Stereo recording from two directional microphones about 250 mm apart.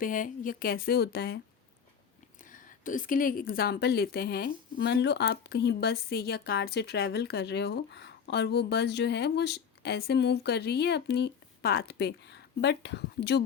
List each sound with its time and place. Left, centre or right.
0.0 s speech: left
2.4 s speech: left